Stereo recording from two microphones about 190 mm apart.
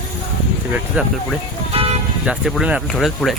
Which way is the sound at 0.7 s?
5° right (ahead or behind).